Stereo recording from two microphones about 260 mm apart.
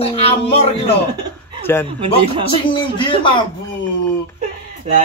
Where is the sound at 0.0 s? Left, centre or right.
Left.